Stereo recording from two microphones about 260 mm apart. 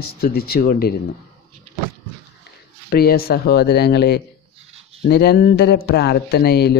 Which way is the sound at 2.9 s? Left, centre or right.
Left.